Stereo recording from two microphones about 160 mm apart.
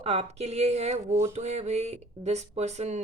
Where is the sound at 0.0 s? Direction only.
40° right (ahead or behind).